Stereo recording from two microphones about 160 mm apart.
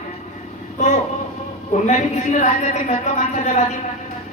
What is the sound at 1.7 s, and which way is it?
A man's voice, 45° left (ahead or behind).